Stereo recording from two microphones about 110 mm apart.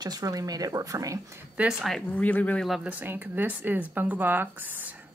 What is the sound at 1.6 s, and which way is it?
Speech, 5° right (ahead or behind).